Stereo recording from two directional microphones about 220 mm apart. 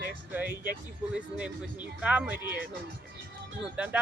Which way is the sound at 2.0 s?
5° right (ahead or behind).